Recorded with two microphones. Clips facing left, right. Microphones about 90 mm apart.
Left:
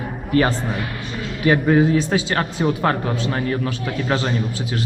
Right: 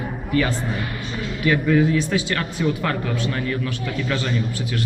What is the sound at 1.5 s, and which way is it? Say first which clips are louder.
Speech: left 3 dB; 40° left (ahead or behind).